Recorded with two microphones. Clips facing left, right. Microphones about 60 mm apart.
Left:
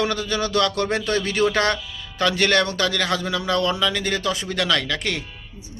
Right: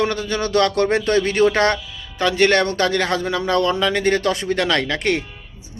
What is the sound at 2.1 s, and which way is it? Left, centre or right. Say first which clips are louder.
Speech: right 3 dB; right.